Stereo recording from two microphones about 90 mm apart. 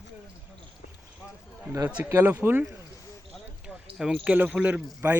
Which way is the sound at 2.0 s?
25° right (ahead or behind).